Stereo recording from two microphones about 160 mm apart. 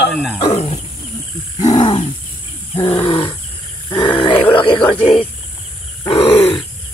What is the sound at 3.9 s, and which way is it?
Grunt, 30° left (ahead or behind).